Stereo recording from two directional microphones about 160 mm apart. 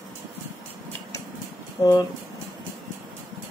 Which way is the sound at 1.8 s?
25° left (ahead or behind).